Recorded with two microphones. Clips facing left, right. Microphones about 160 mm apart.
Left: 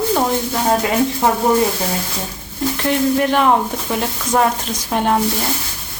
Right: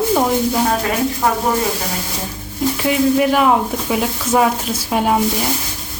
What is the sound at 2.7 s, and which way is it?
Speech, 5° right (ahead or behind).